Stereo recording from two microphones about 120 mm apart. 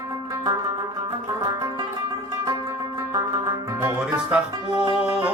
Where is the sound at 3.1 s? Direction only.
30° right (ahead or behind).